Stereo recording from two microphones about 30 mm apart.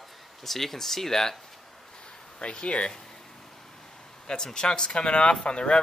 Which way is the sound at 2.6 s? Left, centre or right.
Left.